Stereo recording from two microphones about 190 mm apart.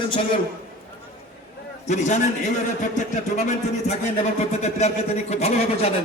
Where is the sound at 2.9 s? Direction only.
40° left (ahead or behind).